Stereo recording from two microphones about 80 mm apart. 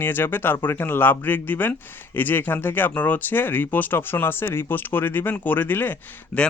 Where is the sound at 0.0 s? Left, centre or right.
Left.